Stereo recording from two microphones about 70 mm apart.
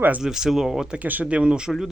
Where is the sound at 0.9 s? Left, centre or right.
Right.